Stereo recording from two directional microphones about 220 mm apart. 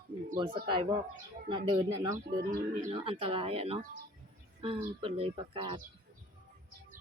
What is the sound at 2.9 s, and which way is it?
A woman's voice, 25° right (ahead or behind).